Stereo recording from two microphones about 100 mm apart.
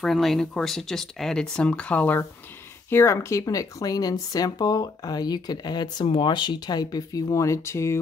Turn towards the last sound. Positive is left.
turn(degrees=30)  # may be behind; listen again after turning